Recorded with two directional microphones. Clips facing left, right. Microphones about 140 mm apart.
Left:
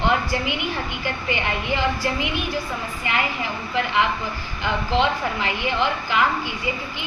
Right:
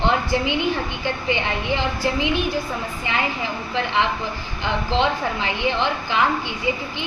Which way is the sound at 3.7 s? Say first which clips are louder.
Even; 30° right (ahead or behind).